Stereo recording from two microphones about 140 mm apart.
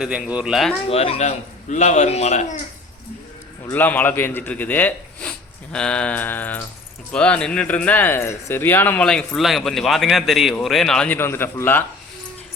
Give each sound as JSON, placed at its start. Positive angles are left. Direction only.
{"t": 0.0, "sound": "speech", "side_deg": -10}
{"t": 0.9, "sound": "speech", "side_deg": 45}
{"t": 1.7, "sound": "a man's voice", "side_deg": 60}
{"t": 3.7, "sound": "speech", "side_deg": 15}